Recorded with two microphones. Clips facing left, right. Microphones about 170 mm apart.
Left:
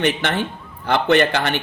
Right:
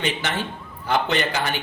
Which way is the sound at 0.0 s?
60° left (ahead or behind).